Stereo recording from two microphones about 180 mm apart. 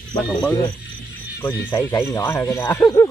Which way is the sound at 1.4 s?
10° left (ahead or behind).